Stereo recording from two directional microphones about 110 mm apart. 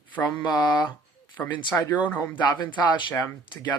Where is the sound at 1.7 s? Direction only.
30° left (ahead or behind).